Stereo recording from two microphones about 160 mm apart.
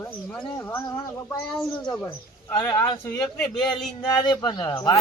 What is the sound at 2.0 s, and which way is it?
Speech, 20° left (ahead or behind).